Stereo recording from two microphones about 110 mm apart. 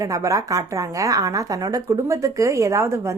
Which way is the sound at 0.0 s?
30° right (ahead or behind).